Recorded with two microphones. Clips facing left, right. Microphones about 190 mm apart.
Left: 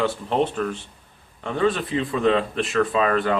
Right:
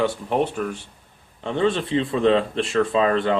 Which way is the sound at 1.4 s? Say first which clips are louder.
Right 1 dB; 25° right (ahead or behind).